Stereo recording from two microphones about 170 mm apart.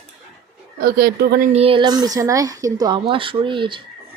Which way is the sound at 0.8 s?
60° right (ahead or behind).